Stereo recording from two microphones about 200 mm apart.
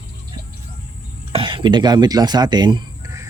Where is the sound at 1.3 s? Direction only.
25° right (ahead or behind).